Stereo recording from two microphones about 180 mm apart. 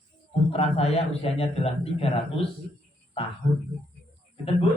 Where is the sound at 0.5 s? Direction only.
35° left (ahead or behind).